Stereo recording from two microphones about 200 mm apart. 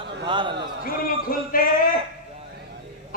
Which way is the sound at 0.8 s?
45° left (ahead or behind).